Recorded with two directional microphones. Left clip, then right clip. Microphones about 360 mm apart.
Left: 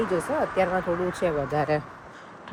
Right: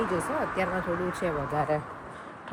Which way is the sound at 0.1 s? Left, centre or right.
Centre.